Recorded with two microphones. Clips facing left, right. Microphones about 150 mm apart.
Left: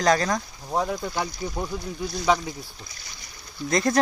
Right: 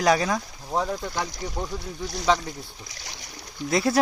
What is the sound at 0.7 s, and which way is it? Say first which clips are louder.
Speech: left 1 dB; 5° left (ahead or behind).